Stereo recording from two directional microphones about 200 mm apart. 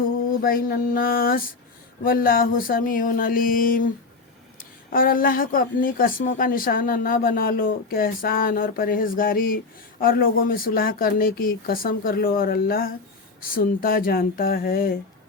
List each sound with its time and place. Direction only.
0.4 s speech: 45° left (ahead or behind)
4.9 s speech: 45° left (ahead or behind)